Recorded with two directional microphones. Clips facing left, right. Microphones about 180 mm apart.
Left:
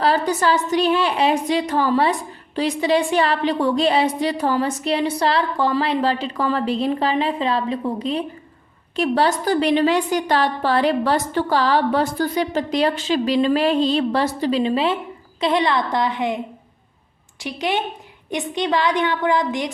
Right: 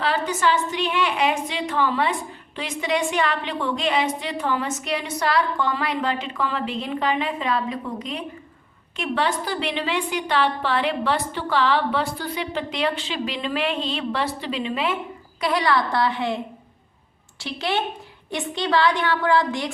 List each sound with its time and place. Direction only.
0.0 s a woman's voice: 35° left (ahead or behind); by 16.4 s 15° left (ahead or behind)
17.4 s a woman's voice: 15° left (ahead or behind)